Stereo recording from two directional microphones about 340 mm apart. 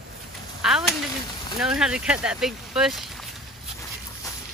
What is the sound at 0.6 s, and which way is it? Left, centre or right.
Speech, centre.